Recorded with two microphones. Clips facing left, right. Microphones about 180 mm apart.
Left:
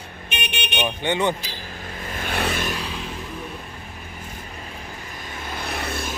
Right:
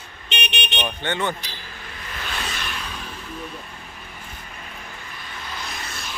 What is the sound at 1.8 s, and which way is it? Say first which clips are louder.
Vehicle: left 5 dB; 45° left (ahead or behind).